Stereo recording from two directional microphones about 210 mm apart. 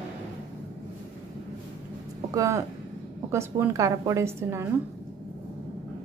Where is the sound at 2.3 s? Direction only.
15° right (ahead or behind).